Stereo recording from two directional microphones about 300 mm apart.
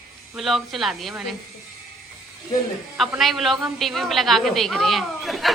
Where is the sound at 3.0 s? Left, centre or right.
Centre.